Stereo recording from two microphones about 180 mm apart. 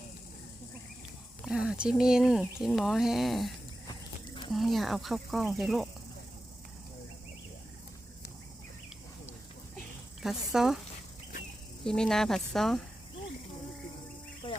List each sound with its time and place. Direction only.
1.5 s speech: 5° right (ahead or behind)
4.5 s speech: centre (ahead or behind)
10.2 s speech: centre (ahead or behind)
11.9 s speech: 5° left (ahead or behind)
14.4 s a sound: 25° left (ahead or behind)